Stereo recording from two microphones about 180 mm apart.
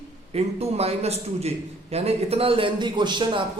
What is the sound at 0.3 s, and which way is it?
A man's voice, 35° right (ahead or behind).